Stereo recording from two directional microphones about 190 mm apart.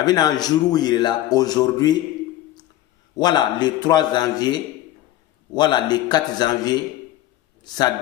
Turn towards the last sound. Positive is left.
turn(degrees=20)  # may be behind; listen again after turning